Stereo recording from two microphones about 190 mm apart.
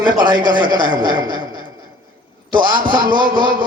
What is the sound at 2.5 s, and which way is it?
A man's voice, 25° right (ahead or behind).